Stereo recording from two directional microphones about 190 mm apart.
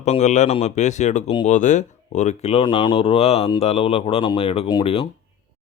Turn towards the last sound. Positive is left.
turn(degrees=30)  # may be behind; listen again after turning